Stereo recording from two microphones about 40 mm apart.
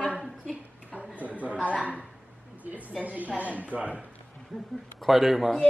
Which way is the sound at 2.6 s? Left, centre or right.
Right.